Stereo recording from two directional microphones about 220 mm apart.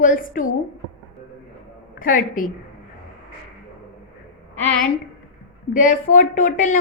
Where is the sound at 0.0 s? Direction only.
35° left (ahead or behind).